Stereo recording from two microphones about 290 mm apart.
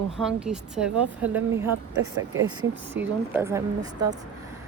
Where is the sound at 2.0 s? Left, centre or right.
Right.